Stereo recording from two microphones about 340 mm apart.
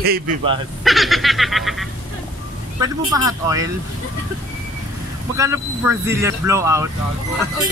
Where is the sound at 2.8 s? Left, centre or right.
Centre.